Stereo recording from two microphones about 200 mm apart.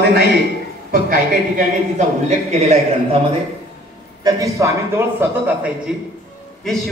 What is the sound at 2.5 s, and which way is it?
Speech, 35° right (ahead or behind).